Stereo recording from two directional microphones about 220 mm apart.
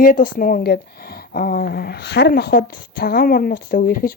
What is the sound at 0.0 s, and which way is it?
Speech, 40° left (ahead or behind).